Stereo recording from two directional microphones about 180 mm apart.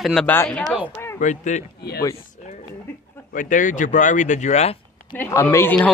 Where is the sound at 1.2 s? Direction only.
40° left (ahead or behind).